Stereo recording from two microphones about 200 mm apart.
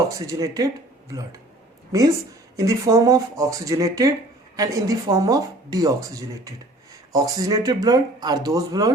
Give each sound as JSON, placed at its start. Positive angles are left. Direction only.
{"t": 0.1, "sound": "speech", "side_deg": -15}